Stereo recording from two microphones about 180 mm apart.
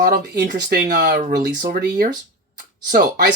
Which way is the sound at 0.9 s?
65° right (ahead or behind).